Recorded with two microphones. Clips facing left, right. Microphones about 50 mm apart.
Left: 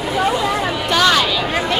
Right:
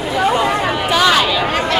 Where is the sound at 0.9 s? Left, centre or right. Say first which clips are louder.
Right 1 dB; centre.